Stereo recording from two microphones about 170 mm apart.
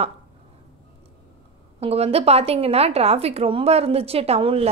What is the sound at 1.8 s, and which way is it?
A woman's voice, 35° right (ahead or behind).